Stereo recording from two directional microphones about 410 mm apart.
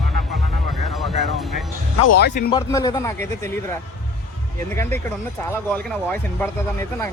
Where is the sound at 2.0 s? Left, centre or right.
Left.